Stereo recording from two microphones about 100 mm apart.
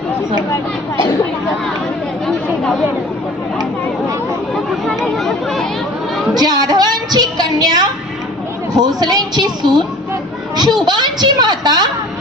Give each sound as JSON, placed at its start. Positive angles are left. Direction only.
{"t": 2.2, "sound": "chatter", "side_deg": 5}
{"t": 4.5, "sound": "chatter", "side_deg": 0}
{"t": 6.3, "sound": "a woman's voice", "side_deg": -40}
{"t": 10.8, "sound": "a woman's voice", "side_deg": -45}